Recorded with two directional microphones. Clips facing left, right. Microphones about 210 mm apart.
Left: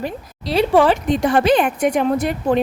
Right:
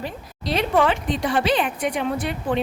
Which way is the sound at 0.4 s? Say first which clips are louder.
Left 5 dB; 30° left (ahead or behind).